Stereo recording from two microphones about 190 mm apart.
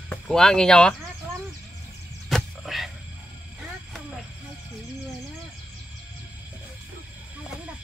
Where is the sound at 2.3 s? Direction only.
Centre (ahead or behind).